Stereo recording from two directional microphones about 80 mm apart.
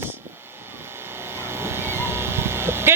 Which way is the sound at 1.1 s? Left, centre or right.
Right.